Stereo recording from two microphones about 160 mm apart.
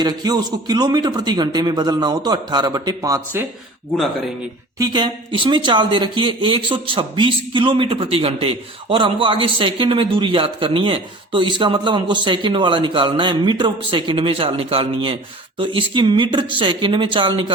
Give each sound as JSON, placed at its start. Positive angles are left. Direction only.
{"t": 0.0, "sound": "speech", "side_deg": -25}
{"t": 4.8, "sound": "speech", "side_deg": -25}